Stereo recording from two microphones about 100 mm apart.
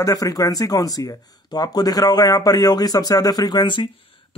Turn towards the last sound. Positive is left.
turn(degrees=55)  # may be behind; listen again after turning